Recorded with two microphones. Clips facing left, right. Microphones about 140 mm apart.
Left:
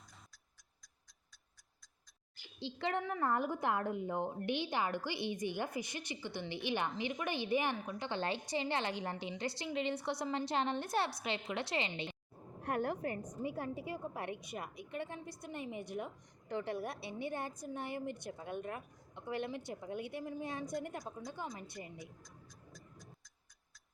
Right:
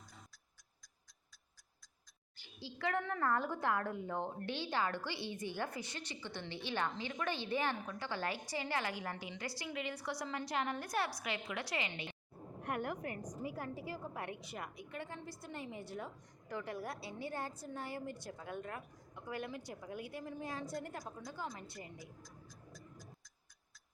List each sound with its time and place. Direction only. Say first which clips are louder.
2.6 s a woman's voice: left 1 dB; 25° left (ahead or behind)
22.2 s tick-tock: right 2 dB; centre (ahead or behind)